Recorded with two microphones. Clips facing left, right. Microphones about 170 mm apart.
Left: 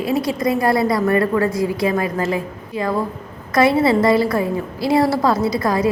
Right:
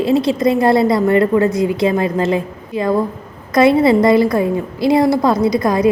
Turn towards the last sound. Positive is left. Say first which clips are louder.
# right 4 dB
turn(degrees=-20)  # may be behind; listen again after turning